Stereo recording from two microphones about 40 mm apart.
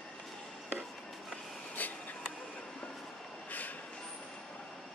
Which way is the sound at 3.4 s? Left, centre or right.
Left.